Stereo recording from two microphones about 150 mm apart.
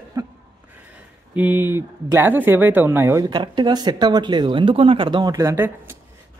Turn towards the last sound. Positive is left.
turn(degrees=-15)  # may be behind; listen again after turning